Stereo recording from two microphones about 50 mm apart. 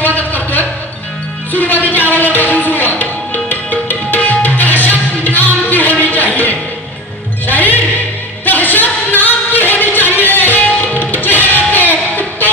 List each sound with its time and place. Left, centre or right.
0.0 s a sound: left
1.5 s music: left
8.5 s singing: left
10.6 s music: left